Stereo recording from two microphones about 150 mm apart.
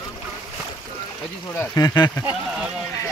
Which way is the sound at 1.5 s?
15° left (ahead or behind).